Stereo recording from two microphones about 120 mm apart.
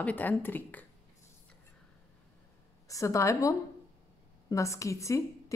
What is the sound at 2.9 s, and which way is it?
A woman's voice, 25° left (ahead or behind).